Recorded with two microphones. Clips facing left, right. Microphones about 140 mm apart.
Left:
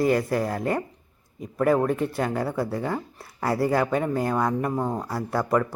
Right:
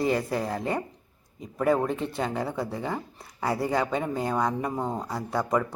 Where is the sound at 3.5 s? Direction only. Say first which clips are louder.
Left 5 dB; 20° right (ahead or behind).